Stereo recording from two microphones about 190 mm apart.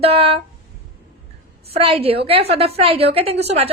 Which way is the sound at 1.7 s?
30° right (ahead or behind).